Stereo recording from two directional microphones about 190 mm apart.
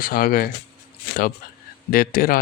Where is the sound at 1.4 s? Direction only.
50° left (ahead or behind).